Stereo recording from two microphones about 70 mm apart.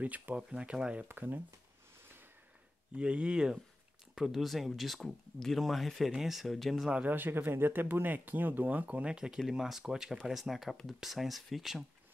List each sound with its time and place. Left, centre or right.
0.0 s speech: right
1.0 s speech: right
3.0 s speech: centre
6.9 s speech: centre
7.2 s speech: right; by 11.8 s centre